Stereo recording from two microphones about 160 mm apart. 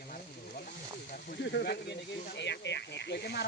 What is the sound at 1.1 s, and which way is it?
Speech, 80° left.